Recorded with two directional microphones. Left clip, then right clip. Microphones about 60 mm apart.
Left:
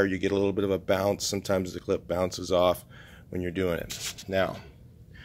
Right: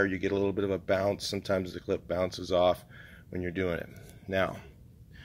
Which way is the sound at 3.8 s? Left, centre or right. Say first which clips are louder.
Left 9 dB; centre.